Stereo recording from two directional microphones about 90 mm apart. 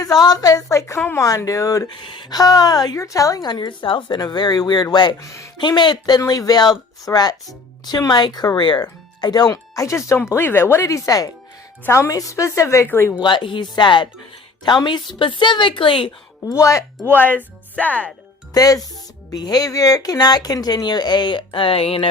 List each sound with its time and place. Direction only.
0.2 s a woman's voice: 45° left (ahead or behind)
1.9 s speech: 65° left (ahead or behind)
4.2 s speech: 50° left (ahead or behind)
5.2 s a woman's voice: 35° left (ahead or behind)
5.5 s a woman's voice: 55° left (ahead or behind); by 13.1 s 30° left (ahead or behind)
13.2 s a woman's voice: 65° left (ahead or behind)
16.5 s a woman's voice: 35° left (ahead or behind)
17.2 s speech: 20° left (ahead or behind)
18.5 s speech: 45° left (ahead or behind); by 22.1 s 90° left